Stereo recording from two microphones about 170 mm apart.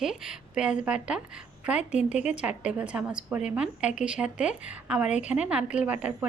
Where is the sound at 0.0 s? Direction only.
Centre (ahead or behind).